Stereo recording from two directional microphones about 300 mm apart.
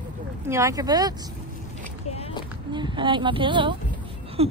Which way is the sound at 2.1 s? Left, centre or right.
Centre.